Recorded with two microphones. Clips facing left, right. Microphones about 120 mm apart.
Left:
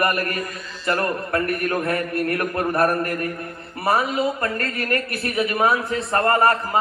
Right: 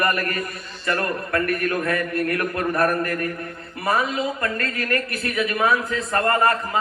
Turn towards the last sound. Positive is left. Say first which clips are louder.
# left 2 dB
turn(degrees=30)  # may be behind; listen again after turning